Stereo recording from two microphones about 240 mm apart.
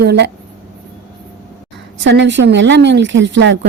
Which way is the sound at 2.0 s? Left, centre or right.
Right.